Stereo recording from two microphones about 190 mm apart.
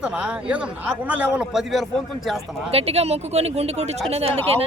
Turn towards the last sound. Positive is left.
turn(degrees=-30)  # may be behind; listen again after turning